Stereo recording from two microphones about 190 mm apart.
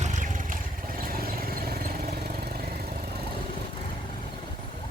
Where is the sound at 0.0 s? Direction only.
40° right (ahead or behind).